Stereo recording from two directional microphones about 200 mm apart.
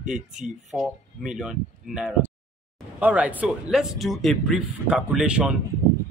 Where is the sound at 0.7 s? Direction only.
Centre (ahead or behind).